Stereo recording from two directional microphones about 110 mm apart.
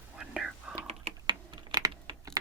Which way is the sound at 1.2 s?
45° right (ahead or behind).